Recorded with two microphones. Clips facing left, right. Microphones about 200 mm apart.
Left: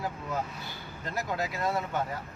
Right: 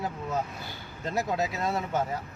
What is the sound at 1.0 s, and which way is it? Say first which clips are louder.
Speech: right 4 dB; 25° right (ahead or behind).